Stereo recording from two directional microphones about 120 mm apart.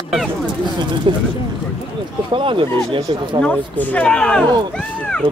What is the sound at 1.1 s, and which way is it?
Speech, 45° right (ahead or behind).